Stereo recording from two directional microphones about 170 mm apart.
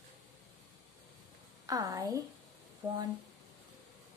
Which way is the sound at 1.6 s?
20° right (ahead or behind).